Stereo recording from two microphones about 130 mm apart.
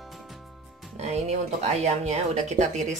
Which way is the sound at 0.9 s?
55° right (ahead or behind).